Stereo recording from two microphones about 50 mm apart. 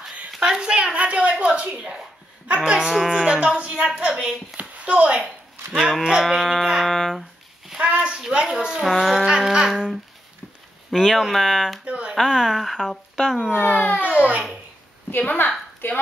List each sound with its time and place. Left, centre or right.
0.4 s a child's voice: centre
2.9 s livestock: centre
4.6 s a sound: right
6.4 s speech: centre
6.9 s a sound: centre
7.7 s a sound: right
8.3 s livestock: centre
8.8 s livestock: centre
10.9 s speech: centre
11.8 s a sound: right
12.2 s speech: centre
13.5 s a child's voice: left
15.8 s a woman's voice: left